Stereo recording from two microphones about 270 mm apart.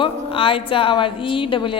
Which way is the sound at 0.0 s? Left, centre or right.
Centre.